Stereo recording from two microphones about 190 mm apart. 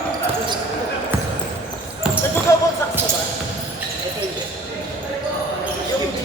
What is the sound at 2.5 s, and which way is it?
Basketball bounce, 15° left (ahead or behind).